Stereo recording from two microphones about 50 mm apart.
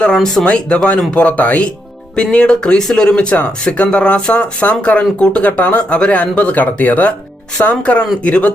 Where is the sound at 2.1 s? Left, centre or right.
Left.